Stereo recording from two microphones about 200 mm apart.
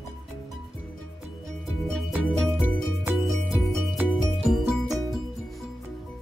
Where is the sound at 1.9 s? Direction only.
5° right (ahead or behind).